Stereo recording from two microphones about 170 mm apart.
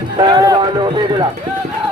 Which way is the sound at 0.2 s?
25° right (ahead or behind).